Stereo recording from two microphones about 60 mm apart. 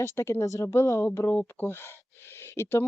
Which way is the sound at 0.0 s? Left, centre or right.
Left.